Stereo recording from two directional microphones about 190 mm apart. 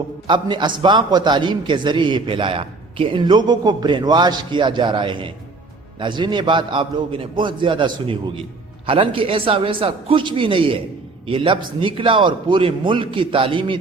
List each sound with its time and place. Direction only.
0.3 s a man's voice: 25° right (ahead or behind)